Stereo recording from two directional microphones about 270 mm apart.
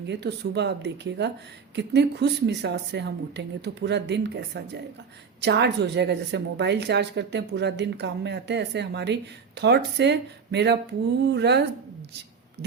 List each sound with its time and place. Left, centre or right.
0.1 s a woman's voice: right